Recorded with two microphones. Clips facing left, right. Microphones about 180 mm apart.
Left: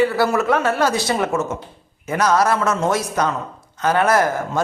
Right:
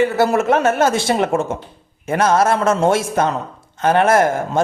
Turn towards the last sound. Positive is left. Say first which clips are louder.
# right 3 dB
turn(degrees=-25)  # may be behind; listen again after turning